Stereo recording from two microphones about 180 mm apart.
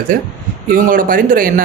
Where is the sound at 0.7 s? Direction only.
50° right (ahead or behind).